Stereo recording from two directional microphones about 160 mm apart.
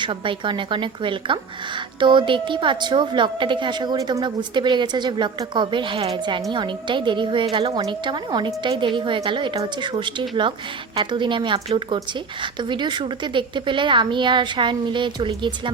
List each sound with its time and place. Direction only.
0.0 s speech: 30° right (ahead or behind)